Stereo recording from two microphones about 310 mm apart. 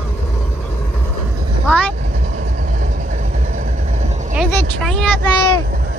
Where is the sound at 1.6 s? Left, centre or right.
Centre.